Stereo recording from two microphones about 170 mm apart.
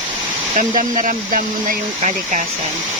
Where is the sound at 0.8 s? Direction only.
50° right (ahead or behind).